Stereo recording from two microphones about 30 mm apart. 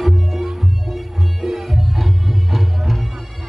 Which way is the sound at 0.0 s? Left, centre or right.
Centre.